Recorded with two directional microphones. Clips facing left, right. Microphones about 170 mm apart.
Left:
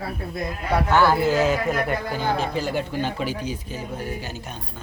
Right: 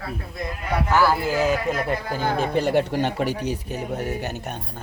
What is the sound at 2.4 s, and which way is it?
Speech, 65° right (ahead or behind).